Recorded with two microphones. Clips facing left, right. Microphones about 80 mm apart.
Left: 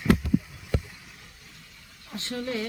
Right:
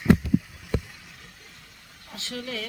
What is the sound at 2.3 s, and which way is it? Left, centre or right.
Speech, left.